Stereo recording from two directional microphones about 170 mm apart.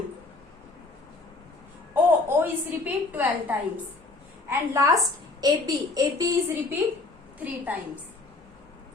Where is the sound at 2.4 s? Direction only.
10° right (ahead or behind).